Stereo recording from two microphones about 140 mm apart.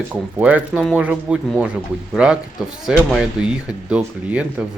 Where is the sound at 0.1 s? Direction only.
10° right (ahead or behind).